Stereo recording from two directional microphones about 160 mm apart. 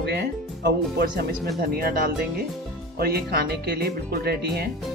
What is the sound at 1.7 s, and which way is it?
Speech, 65° right (ahead or behind).